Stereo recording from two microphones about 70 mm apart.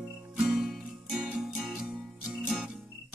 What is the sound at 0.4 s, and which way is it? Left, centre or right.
Music, centre.